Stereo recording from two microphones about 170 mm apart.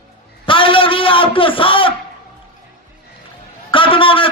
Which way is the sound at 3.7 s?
30° left (ahead or behind).